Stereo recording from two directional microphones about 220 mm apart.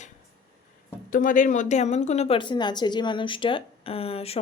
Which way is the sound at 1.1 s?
35° left (ahead or behind).